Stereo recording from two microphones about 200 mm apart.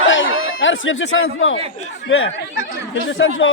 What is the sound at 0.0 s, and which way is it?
Chatter, 70° left (ahead or behind).